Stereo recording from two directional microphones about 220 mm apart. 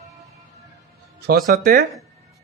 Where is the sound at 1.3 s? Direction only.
40° right (ahead or behind).